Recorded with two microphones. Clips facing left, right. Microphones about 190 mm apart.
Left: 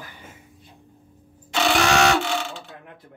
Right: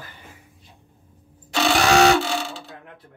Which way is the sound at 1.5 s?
35° right (ahead or behind).